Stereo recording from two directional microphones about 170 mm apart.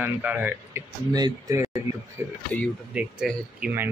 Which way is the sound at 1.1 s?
20° right (ahead or behind).